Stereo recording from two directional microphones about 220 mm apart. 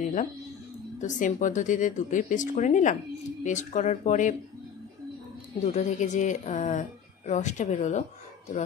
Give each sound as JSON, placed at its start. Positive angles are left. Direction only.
{"t": 0.0, "sound": "music", "side_deg": 35}
{"t": 0.9, "sound": "a woman's voice", "side_deg": 35}
{"t": 5.7, "sound": "a woman's voice", "side_deg": 35}